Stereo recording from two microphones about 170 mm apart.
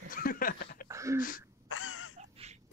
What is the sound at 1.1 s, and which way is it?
Speech, 55° left (ahead or behind).